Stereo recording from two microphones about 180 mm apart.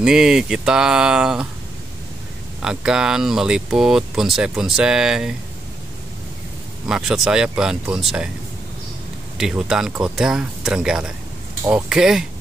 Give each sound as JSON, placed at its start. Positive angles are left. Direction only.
{"t": 0.0, "sound": "speech", "side_deg": -5}
{"t": 2.6, "sound": "speech", "side_deg": -5}
{"t": 6.9, "sound": "speech", "side_deg": -5}
{"t": 9.4, "sound": "speech", "side_deg": -5}